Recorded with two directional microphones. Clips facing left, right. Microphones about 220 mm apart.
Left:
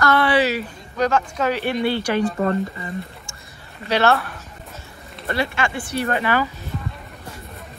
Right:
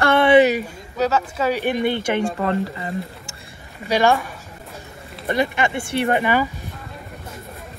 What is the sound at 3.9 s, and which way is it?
Speech, 15° right (ahead or behind).